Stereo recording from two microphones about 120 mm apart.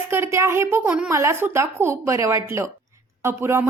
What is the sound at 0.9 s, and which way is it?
Speech, 10° right (ahead or behind).